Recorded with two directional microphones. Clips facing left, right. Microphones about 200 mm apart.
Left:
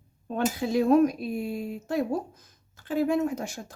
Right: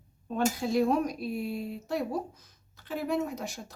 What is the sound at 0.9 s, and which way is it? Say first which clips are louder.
Speech: left 7 dB; 50° left (ahead or behind).